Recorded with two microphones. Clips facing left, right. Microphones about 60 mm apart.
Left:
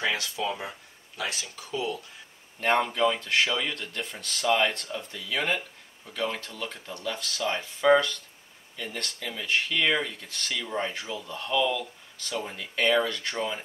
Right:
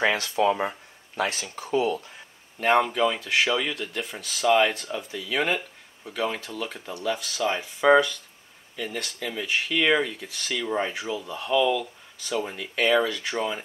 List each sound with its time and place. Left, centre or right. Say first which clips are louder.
0.0 s speech: right 7 dB; right
2.6 s speech: right 3 dB; centre